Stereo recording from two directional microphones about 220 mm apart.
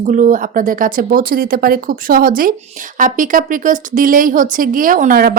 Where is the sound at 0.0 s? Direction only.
35° right (ahead or behind).